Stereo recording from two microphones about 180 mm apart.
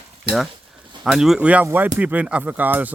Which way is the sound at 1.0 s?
5° right (ahead or behind).